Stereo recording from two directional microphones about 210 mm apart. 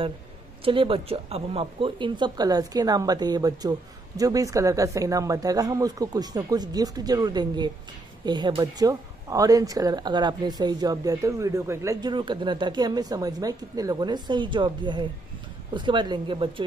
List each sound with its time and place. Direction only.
0.7 s speech: 25° right (ahead or behind)